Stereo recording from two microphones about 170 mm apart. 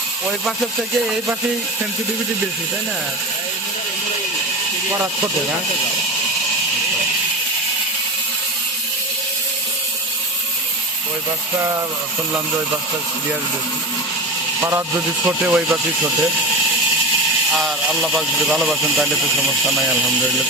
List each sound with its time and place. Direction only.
14.6 s speech: 15° right (ahead or behind)
17.5 s speech: centre (ahead or behind)